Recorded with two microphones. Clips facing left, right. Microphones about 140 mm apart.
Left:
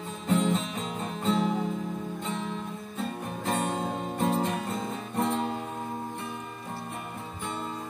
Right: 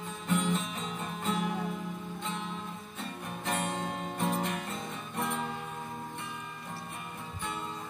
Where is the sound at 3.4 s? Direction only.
35° left (ahead or behind).